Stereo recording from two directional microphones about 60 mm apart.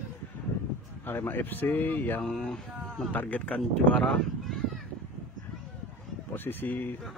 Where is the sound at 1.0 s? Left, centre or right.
Left.